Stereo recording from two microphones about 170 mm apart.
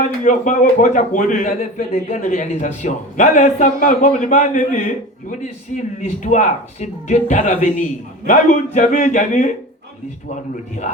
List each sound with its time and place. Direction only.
0.3 s speech: 50° left (ahead or behind)